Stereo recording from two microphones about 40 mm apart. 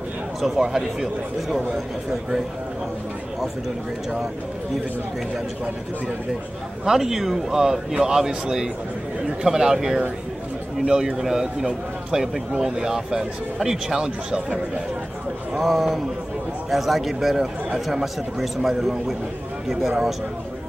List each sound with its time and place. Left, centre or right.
0.4 s a man's voice: centre
6.8 s a man's voice: centre
15.6 s a man's voice: centre